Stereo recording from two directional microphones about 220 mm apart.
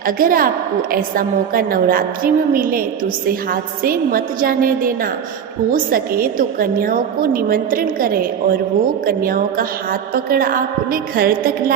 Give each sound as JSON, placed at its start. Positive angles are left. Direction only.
{"t": 0.2, "sound": "a woman's voice", "side_deg": -40}
{"t": 5.7, "sound": "a woman's voice", "side_deg": -40}